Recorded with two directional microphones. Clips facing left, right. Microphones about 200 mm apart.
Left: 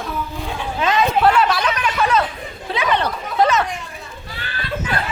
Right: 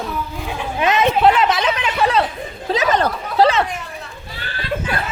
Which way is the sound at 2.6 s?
40° right (ahead or behind).